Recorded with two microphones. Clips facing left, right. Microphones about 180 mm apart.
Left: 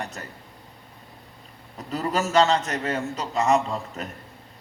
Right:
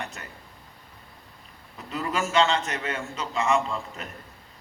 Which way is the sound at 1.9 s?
40° left (ahead or behind).